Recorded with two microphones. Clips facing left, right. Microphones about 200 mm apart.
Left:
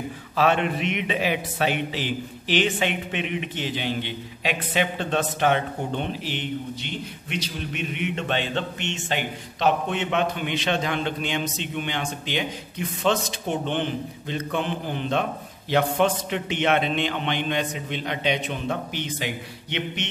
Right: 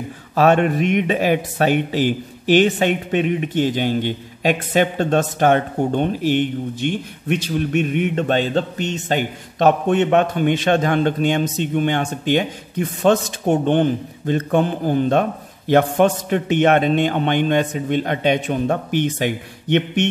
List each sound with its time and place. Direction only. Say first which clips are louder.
0.4 s a man's voice: right 7 dB; 45° right (ahead or behind)